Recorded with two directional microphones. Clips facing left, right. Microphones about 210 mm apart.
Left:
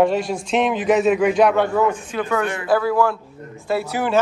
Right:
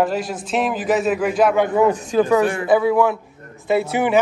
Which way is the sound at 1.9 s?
35° right (ahead or behind).